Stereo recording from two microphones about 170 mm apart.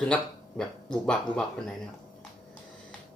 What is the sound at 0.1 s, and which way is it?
Speech, 5° left (ahead or behind).